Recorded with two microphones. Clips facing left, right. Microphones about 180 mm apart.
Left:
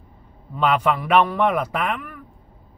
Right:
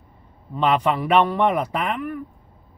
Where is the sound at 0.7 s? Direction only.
30° right (ahead or behind).